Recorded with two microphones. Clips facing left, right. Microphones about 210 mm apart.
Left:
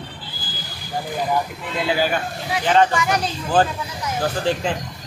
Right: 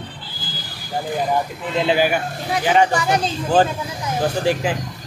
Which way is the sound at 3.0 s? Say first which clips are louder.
Right 2 dB; 30° right (ahead or behind).